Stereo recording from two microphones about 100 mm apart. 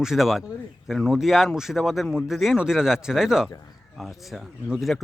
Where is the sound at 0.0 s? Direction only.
5° right (ahead or behind).